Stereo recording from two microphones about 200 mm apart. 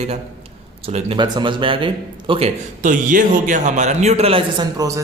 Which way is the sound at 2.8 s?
40° right (ahead or behind).